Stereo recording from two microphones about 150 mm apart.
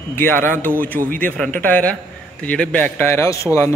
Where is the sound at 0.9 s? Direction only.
70° right (ahead or behind).